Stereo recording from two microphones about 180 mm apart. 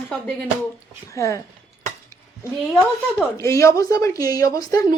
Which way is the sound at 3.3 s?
15° left (ahead or behind).